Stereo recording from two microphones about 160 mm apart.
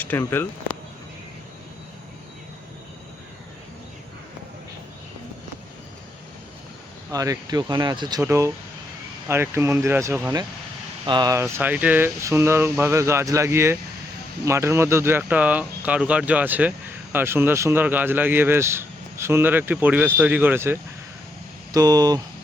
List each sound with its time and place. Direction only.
0.0 s speech: 15° left (ahead or behind)
7.1 s speech: 20° right (ahead or behind)
11.0 s speech: 25° right (ahead or behind)
21.7 s speech: 25° right (ahead or behind)